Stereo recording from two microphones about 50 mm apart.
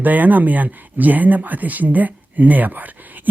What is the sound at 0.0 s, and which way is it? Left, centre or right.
Speech, right.